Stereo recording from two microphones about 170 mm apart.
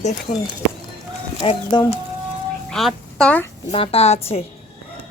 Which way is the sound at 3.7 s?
35° left (ahead or behind).